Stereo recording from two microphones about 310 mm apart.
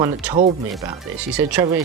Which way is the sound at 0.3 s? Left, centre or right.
Centre.